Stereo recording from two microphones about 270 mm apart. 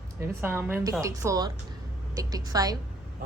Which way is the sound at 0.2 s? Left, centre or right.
Centre.